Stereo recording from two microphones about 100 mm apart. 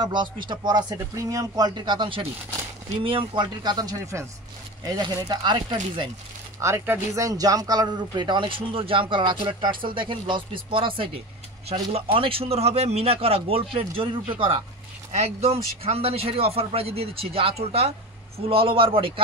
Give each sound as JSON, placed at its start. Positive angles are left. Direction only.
{"t": 0.0, "sound": "speech", "side_deg": -50}
{"t": 0.9, "sound": "speech", "side_deg": -30}
{"t": 6.6, "sound": "speech", "side_deg": -25}
{"t": 15.1, "sound": "speech", "side_deg": -90}
{"t": 18.5, "sound": "speech", "side_deg": -60}